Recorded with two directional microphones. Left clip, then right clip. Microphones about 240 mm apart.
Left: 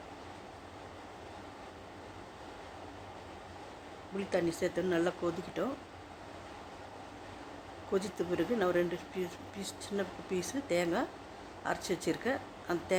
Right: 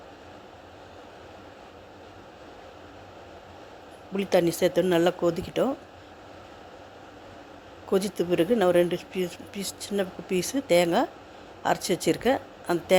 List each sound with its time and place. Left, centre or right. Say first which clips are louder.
4.2 s speech: right 10 dB; right
7.9 s speech: right 9 dB; right